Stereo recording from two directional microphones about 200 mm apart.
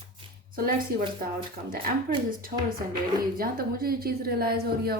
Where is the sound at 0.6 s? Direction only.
45° right (ahead or behind).